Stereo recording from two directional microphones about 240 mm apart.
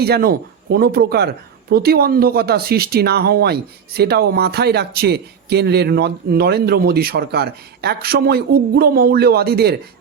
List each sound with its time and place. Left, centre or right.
0.0 s speech: right